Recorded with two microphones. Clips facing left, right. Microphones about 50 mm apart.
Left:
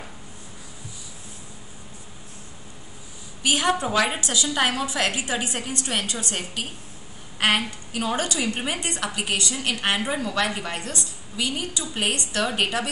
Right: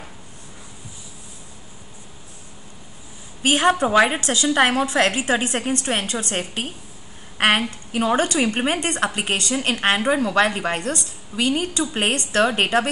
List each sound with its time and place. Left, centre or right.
3.4 s a woman's voice: right